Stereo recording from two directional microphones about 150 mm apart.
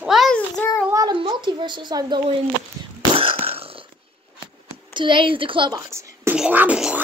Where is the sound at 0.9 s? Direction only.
30° right (ahead or behind).